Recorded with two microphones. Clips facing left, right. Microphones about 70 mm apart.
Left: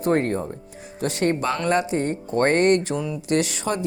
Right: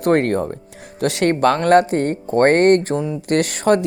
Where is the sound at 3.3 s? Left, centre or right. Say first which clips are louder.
Right 7 dB; right.